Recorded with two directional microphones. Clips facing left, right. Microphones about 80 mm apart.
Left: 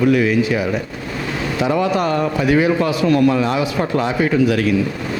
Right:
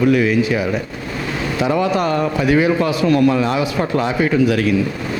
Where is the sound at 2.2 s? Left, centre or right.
Right.